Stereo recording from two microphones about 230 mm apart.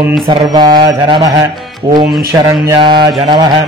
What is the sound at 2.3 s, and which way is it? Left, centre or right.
A man's voice, centre.